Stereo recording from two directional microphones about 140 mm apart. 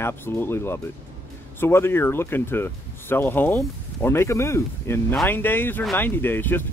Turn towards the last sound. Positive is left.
turn(degrees=15)  # may be behind; listen again after turning